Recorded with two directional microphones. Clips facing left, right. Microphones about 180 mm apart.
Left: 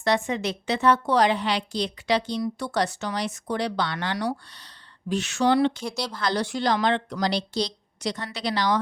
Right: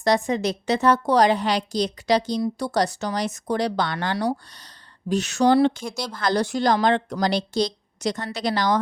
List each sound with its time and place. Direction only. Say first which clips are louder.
0.0 s a woman's voice: right 3 dB; 40° right (ahead or behind)